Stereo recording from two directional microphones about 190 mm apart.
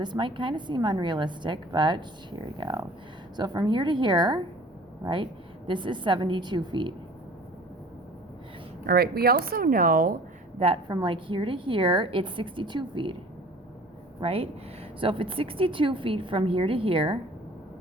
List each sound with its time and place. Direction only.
0.0 s a woman's voice: 25° right (ahead or behind)
8.9 s speech: 55° right (ahead or behind)
10.6 s a woman's voice: 25° right (ahead or behind)
14.2 s a woman's voice: 30° right (ahead or behind)